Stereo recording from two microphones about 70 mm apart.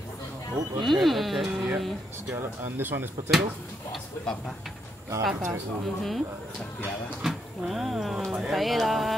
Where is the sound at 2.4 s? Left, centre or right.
Right.